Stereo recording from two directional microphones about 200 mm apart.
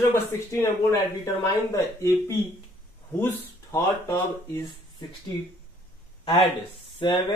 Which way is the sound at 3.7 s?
15° left (ahead or behind).